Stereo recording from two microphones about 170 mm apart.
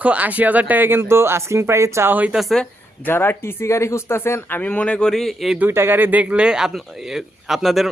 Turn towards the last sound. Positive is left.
turn(degrees=0)  # may be behind; listen again after turning